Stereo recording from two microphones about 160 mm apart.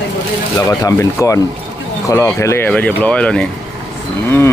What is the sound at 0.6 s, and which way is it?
Speech, 20° left (ahead or behind).